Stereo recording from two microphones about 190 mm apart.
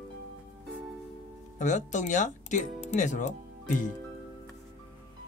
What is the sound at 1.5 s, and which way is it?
Speech, 40° left (ahead or behind).